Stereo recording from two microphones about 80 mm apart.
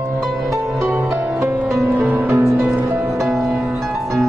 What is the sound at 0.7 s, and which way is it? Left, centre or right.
Music, centre.